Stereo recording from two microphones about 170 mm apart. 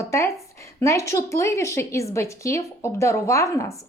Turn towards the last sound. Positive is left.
turn(degrees=20)  # may be behind; listen again after turning